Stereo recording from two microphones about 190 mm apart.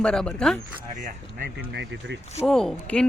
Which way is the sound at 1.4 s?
65° right (ahead or behind).